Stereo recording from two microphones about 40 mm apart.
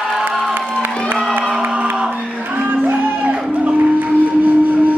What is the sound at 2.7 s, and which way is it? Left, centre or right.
Music, right.